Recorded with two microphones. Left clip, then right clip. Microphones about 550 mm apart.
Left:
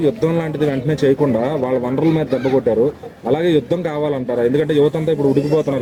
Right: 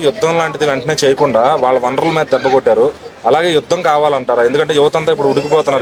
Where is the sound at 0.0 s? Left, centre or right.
Right.